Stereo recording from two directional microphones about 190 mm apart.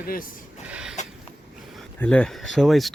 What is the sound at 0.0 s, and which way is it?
Speech, 50° left (ahead or behind).